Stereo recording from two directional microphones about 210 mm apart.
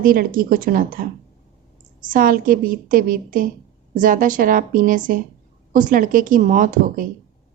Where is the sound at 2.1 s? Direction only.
40° right (ahead or behind).